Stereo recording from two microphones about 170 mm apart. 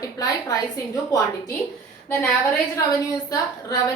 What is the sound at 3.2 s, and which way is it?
Speech, 20° left (ahead or behind).